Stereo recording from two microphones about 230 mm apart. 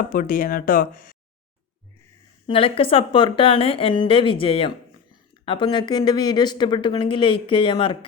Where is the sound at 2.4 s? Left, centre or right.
Left.